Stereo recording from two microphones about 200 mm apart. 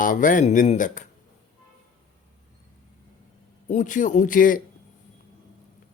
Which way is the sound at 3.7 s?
40° left (ahead or behind).